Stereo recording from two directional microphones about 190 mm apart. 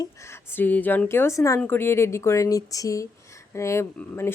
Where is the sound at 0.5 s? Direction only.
10° left (ahead or behind).